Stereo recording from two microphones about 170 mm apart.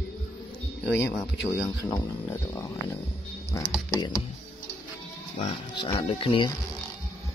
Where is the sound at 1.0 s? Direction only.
15° left (ahead or behind).